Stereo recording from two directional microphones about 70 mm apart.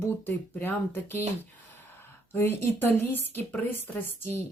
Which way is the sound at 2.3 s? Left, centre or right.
Left.